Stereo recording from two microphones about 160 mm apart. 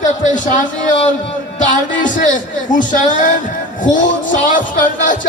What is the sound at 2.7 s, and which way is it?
A man's voice, 55° left (ahead or behind).